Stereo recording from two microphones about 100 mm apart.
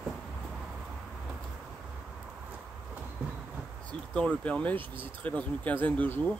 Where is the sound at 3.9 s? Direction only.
10° left (ahead or behind).